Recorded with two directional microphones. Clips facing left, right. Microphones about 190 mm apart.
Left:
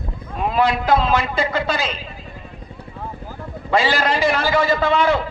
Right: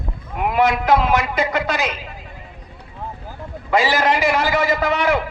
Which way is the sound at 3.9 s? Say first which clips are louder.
Right 1 dB; 20° right (ahead or behind).